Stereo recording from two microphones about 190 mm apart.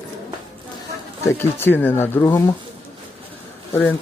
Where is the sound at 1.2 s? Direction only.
10° left (ahead or behind).